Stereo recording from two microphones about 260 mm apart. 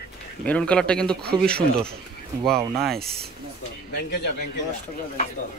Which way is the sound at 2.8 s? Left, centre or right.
Centre.